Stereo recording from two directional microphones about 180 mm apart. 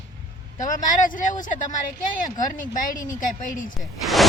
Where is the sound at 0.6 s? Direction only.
45° left (ahead or behind).